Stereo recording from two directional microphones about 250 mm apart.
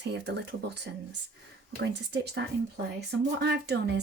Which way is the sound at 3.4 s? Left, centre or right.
Right.